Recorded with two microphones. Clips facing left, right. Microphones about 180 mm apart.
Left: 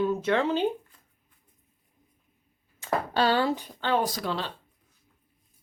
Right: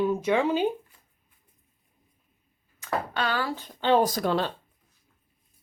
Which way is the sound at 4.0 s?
45° right (ahead or behind).